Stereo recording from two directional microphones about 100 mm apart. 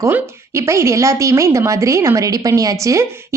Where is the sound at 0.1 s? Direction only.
25° right (ahead or behind).